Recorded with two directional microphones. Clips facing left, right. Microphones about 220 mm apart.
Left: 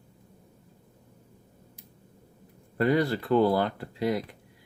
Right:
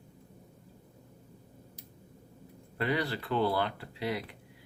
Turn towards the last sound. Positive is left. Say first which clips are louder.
# left 7 dB
turn(degrees=45)  # may be behind; listen again after turning